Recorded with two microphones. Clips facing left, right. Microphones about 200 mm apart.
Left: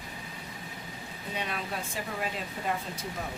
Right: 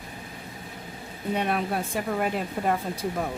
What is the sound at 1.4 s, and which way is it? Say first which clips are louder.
A woman's voice: right 8 dB; 55° right (ahead or behind).